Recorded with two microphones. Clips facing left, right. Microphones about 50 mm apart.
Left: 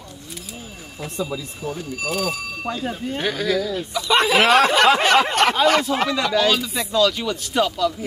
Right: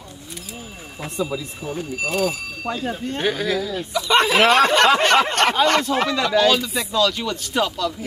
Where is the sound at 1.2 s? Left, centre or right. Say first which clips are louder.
Right 2 dB; centre.